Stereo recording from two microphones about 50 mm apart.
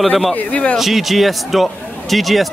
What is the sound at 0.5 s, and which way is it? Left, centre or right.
Speech, left.